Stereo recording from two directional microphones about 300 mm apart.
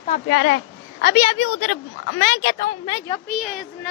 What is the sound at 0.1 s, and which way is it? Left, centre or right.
Speech, left.